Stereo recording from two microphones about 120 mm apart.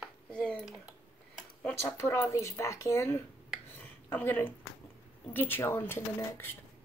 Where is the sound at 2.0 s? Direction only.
25° left (ahead or behind).